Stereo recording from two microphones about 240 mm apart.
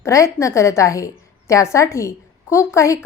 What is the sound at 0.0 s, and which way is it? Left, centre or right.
A woman's voice, centre.